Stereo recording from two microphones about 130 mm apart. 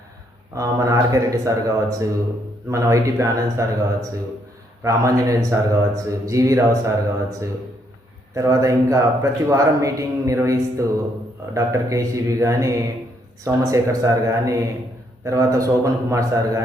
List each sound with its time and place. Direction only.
0.5 s speech: 25° right (ahead or behind)
4.8 s speech: 25° right (ahead or behind)
8.4 s speech: 25° right (ahead or behind)